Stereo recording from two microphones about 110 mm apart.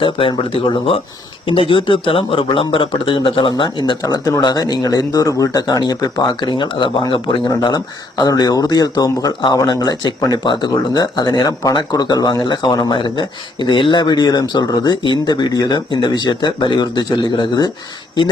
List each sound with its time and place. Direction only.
0.0 s speech: 55° left (ahead or behind)
1.5 s speech: 50° left (ahead or behind)
4.0 s speech: 35° left (ahead or behind)